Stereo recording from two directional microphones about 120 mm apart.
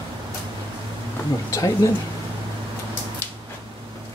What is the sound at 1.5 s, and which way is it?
Speech, 25° left (ahead or behind).